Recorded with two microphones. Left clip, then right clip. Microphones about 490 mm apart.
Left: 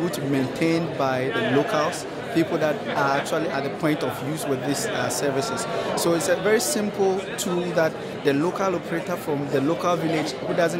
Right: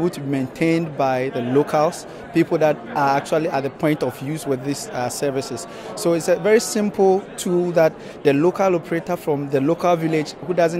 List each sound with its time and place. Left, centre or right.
0.3 s a man's voice: right